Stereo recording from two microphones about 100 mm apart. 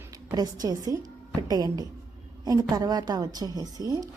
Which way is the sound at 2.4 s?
40° right (ahead or behind).